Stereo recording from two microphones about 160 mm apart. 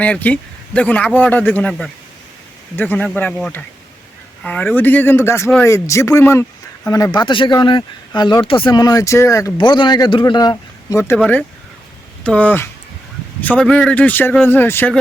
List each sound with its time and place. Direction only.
0.0 s speech: 10° left (ahead or behind)
11.2 s speech: 10° left (ahead or behind)